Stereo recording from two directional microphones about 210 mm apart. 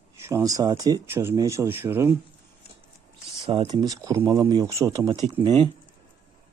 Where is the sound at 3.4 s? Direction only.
25° right (ahead or behind).